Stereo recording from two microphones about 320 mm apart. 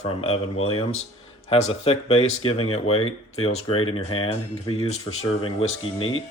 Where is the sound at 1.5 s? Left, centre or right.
Centre.